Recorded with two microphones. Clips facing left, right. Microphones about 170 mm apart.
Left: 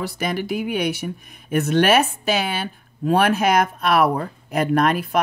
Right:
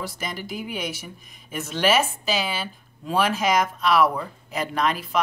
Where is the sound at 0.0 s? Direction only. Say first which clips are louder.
Left 7 dB; 65° left (ahead or behind).